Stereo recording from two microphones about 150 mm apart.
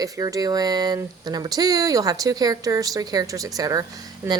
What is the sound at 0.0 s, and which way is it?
A woman's voice, 25° right (ahead or behind).